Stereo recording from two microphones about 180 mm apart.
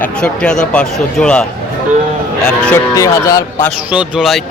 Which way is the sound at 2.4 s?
5° left (ahead or behind).